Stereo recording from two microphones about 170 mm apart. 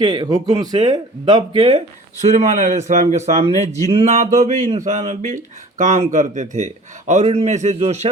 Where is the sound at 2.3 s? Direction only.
45° right (ahead or behind).